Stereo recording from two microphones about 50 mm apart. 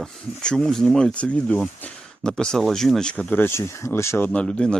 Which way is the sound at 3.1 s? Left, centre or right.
Centre.